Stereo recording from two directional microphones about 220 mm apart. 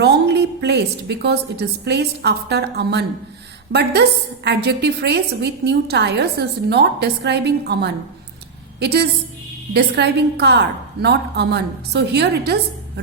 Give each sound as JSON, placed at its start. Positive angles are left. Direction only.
{"t": 0.0, "sound": "a woman's voice", "side_deg": -50}